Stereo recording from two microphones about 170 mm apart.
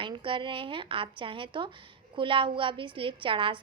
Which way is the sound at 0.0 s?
30° right (ahead or behind).